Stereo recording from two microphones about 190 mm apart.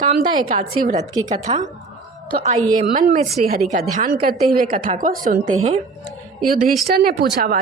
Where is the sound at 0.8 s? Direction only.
45° right (ahead or behind).